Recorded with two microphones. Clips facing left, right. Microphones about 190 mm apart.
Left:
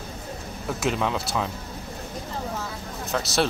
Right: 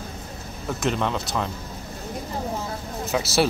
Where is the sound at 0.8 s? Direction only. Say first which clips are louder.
Right 1 dB; 5° left (ahead or behind).